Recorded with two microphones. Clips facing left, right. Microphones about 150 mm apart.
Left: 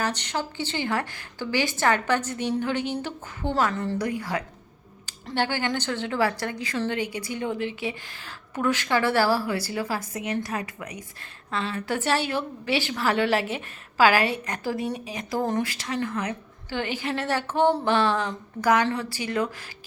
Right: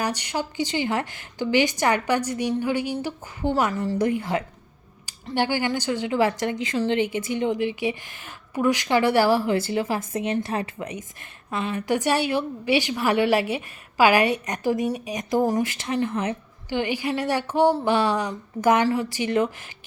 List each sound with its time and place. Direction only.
0.0 s a woman's voice: 10° right (ahead or behind)
3.9 s speech: 25° right (ahead or behind)
5.0 s a woman's voice: 10° right (ahead or behind)
16.6 s a woman's voice: 15° right (ahead or behind)